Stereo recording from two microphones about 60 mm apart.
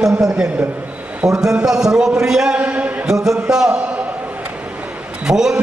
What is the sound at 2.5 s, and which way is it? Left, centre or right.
Speech, right.